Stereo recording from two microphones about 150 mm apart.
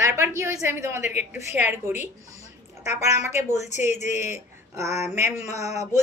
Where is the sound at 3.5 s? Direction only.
50° left (ahead or behind).